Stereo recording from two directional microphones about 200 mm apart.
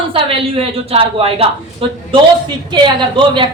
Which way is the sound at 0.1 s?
25° right (ahead or behind).